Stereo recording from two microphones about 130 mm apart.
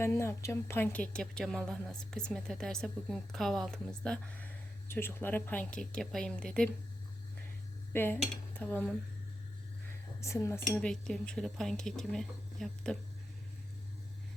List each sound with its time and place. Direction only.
0.0 s a woman's voice: 20° left (ahead or behind)
7.9 s dishes: 15° left (ahead or behind)
10.2 s speech: 20° left (ahead or behind)
10.7 s a woman's voice: 5° left (ahead or behind)